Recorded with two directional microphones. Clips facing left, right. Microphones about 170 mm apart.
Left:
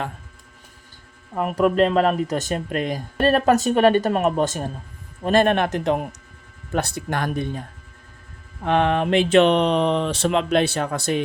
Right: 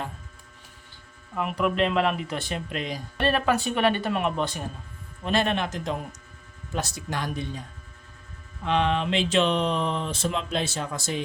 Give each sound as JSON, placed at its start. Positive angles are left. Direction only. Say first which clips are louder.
{"t": 1.3, "sound": "speech", "louder": "left 6 dB", "side_deg": 40}